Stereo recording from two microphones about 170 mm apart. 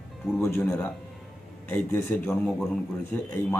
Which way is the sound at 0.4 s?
15° left (ahead or behind).